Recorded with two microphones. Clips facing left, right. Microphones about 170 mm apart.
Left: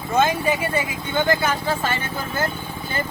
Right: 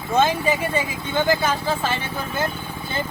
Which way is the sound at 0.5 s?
15° right (ahead or behind).